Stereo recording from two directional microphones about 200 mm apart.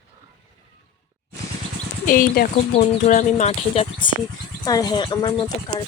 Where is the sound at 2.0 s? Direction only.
45° left (ahead or behind).